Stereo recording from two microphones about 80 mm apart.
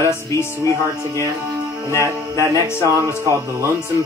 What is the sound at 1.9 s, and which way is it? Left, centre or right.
Music, right.